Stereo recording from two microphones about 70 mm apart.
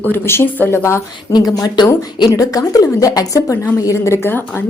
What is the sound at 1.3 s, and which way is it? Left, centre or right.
A woman's voice, left.